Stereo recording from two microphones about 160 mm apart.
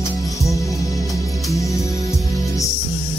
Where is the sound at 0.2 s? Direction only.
20° left (ahead or behind).